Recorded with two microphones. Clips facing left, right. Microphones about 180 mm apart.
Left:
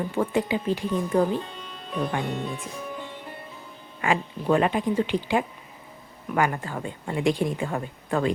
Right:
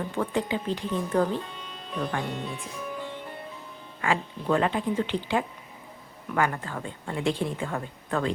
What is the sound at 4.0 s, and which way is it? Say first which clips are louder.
Speech: left 2 dB; 15° left (ahead or behind).